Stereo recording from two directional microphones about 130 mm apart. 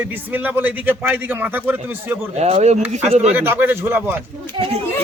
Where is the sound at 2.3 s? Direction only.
55° right (ahead or behind).